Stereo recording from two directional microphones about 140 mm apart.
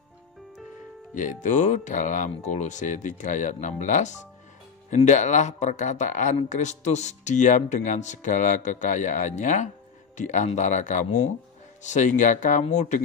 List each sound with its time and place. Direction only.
1.1 s speech: 65° left (ahead or behind)